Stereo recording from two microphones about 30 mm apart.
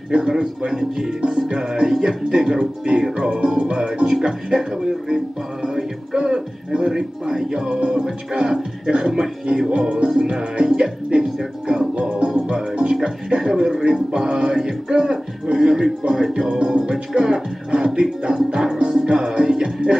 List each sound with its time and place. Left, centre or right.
0.1 s music: right
0.7 s speech: centre
1.2 s speech: right
4.8 s music: right
14.6 s a sound: right
15.5 s music: right
16.1 s speech: right
16.5 s music: right